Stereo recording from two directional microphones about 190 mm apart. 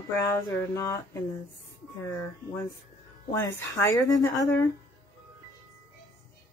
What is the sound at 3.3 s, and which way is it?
Speech, 20° left (ahead or behind).